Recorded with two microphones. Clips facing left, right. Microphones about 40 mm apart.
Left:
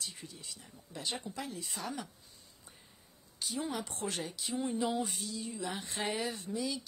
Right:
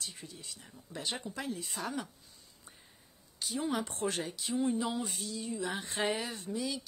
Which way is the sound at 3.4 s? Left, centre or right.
Centre.